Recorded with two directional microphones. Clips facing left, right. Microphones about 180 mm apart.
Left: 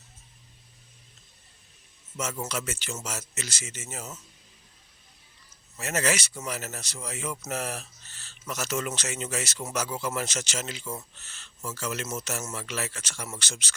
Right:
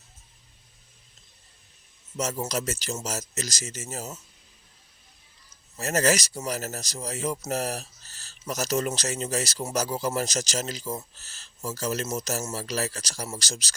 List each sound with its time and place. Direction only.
2.1 s speech: 35° right (ahead or behind)
5.7 s speech: 40° right (ahead or behind)